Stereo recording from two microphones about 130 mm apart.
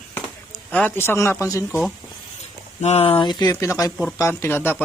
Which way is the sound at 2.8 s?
55° left (ahead or behind).